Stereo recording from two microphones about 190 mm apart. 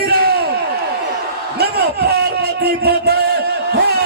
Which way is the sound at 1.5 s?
55° right (ahead or behind).